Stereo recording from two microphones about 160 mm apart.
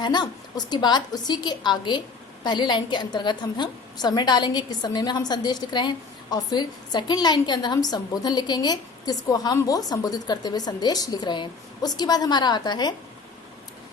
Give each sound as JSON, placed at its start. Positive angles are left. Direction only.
{"t": 0.0, "sound": "a woman's voice", "side_deg": 25}